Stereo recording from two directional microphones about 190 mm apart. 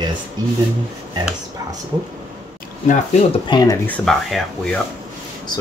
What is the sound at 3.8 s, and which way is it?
Speech, 5° left (ahead or behind).